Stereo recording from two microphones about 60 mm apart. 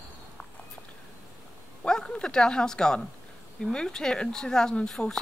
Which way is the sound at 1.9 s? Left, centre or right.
Centre.